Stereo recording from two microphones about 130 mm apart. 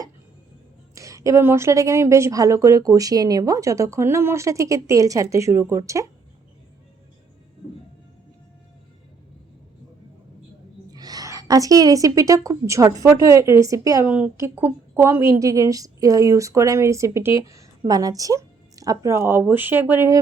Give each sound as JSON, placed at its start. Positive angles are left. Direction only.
{"t": 0.9, "sound": "a woman's voice", "side_deg": -25}
{"t": 10.9, "sound": "a sound", "side_deg": -30}
{"t": 12.5, "sound": "a woman's voice", "side_deg": -25}
{"t": 14.0, "sound": "a woman's voice", "side_deg": -10}